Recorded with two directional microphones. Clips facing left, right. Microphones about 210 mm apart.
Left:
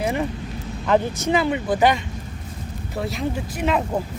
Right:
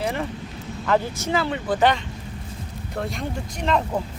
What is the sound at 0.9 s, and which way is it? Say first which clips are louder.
Speech: left 3 dB; 20° left (ahead or behind).